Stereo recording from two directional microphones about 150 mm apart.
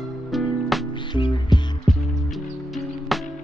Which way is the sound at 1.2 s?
30° left (ahead or behind).